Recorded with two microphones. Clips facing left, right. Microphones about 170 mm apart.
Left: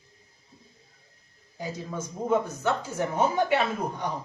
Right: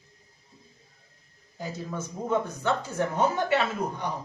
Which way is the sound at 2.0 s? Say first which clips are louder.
Left 2 dB; 10° left (ahead or behind).